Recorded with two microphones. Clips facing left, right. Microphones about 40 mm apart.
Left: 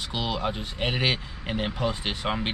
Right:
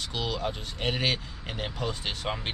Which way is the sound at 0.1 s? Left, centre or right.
Centre.